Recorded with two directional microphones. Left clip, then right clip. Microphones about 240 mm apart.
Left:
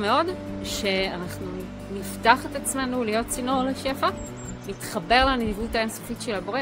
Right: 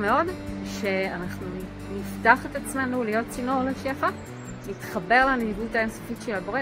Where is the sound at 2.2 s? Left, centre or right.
Centre.